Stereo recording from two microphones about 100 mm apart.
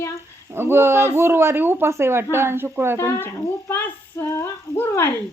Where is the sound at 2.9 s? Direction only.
25° left (ahead or behind).